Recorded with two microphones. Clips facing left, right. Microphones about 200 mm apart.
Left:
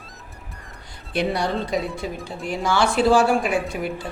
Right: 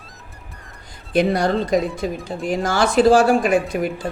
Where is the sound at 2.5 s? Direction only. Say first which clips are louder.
Right 2 dB; 45° right (ahead or behind).